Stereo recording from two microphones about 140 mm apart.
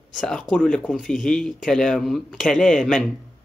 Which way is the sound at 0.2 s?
5° left (ahead or behind).